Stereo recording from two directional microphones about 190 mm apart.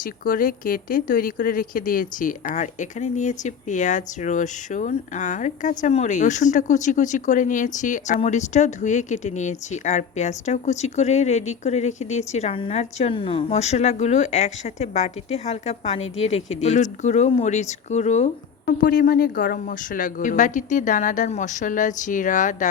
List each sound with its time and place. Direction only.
0.0 s speech: 45° left (ahead or behind)